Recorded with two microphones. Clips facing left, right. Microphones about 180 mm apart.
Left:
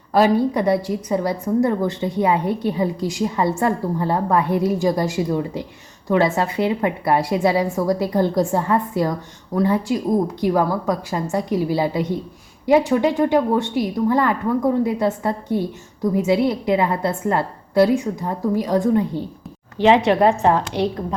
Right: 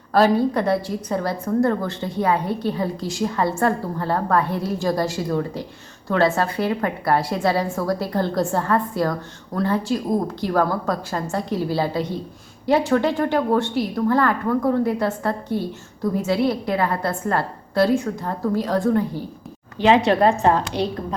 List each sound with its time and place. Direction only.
0.1 s a woman's voice: 15° left (ahead or behind)